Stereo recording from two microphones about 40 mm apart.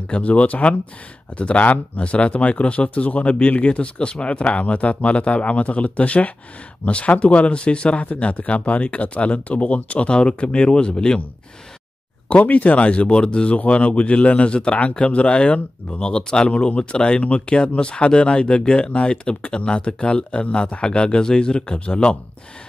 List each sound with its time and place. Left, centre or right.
0.1 s speech: left
12.3 s speech: left